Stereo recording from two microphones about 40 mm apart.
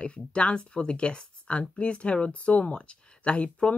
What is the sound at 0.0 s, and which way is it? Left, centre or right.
Speech, left.